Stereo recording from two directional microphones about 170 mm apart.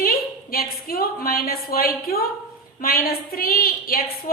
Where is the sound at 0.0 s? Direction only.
60° left (ahead or behind).